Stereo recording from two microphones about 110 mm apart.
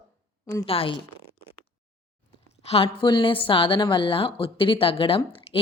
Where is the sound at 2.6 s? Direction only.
60° left (ahead or behind).